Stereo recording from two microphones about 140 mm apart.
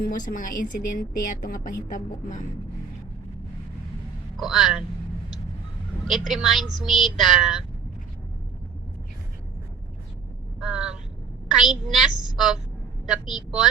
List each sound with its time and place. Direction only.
0.3 s a woman's voice: 75° left (ahead or behind)
4.4 s speech: centre (ahead or behind)
6.1 s speech: centre (ahead or behind)
10.6 s speech: 5° right (ahead or behind)